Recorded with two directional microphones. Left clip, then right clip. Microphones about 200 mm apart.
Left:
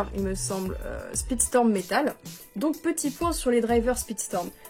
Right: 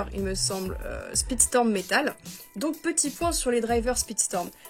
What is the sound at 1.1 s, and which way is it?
A woman's voice, 20° right (ahead or behind).